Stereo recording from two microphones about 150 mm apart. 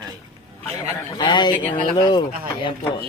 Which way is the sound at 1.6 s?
10° left (ahead or behind).